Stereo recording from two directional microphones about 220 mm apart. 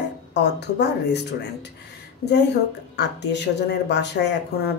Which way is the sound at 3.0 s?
50° left (ahead or behind).